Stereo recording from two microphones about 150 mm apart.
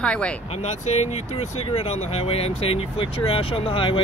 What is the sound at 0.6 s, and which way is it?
Speech, 45° left (ahead or behind).